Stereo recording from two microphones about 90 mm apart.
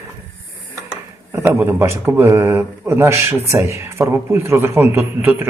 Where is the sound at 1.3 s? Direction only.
25° right (ahead or behind).